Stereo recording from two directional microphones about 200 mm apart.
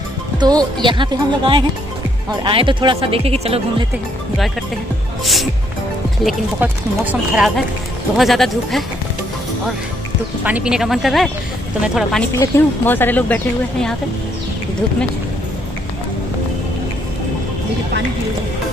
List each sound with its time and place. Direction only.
0.4 s speech: 20° right (ahead or behind)
5.2 s speech: centre (ahead or behind)
10.4 s speech: 5° right (ahead or behind)
12.4 s speech: 10° left (ahead or behind)